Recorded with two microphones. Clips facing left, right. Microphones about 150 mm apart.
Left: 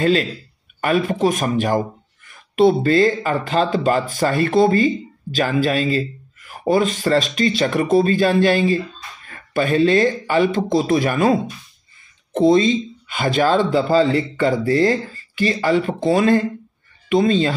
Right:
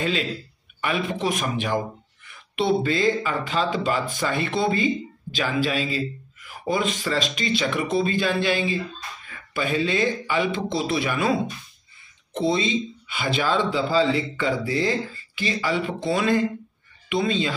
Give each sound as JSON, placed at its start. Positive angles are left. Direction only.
{"t": 0.7, "sound": "speech", "side_deg": 45}